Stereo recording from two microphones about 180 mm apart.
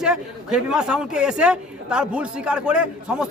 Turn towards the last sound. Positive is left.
turn(degrees=-5)  # may be behind; listen again after turning